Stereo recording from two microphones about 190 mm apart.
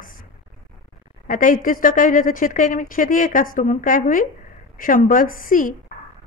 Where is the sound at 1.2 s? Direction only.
45° left (ahead or behind).